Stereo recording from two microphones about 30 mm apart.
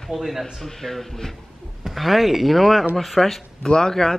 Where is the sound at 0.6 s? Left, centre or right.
Centre.